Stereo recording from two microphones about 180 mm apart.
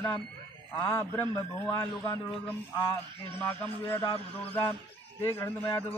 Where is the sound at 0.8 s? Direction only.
10° left (ahead or behind).